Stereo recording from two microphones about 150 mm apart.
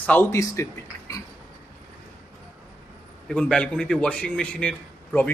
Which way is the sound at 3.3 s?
5° left (ahead or behind).